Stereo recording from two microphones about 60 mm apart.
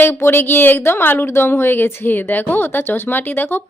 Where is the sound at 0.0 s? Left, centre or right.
Left.